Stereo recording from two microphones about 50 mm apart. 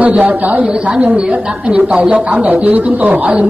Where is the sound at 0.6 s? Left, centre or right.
Right.